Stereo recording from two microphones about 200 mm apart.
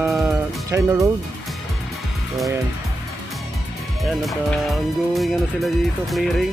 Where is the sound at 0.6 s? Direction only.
15° right (ahead or behind).